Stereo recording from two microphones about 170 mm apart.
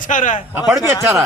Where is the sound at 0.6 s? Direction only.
15° right (ahead or behind).